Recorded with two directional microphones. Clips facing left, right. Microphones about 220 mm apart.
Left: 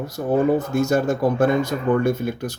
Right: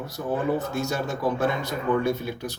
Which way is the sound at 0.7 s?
50° left (ahead or behind).